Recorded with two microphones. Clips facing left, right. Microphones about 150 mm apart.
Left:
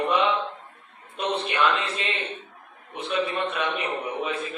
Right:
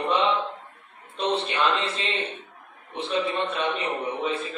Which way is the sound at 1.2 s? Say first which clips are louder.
Even; 30° right (ahead or behind).